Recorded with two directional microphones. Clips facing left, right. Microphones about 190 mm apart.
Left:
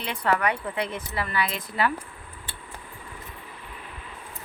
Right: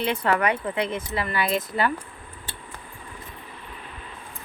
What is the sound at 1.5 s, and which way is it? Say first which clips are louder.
Speech: right 3 dB; centre (ahead or behind).